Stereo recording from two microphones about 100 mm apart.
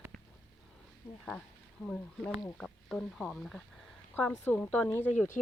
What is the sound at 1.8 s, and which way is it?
Speech, 5° left (ahead or behind).